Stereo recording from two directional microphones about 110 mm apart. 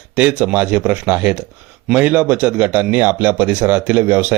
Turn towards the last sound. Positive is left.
turn(degrees=-15)  # may be behind; listen again after turning